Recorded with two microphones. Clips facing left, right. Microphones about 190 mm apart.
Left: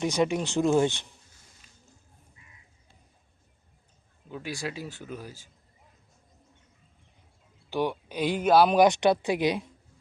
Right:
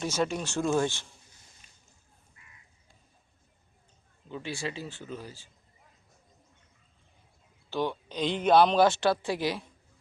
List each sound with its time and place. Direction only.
0.0 s speech: 15° left (ahead or behind)
1.6 s a sound: 20° right (ahead or behind)
4.3 s speech: 5° left (ahead or behind)
7.7 s speech: 10° left (ahead or behind)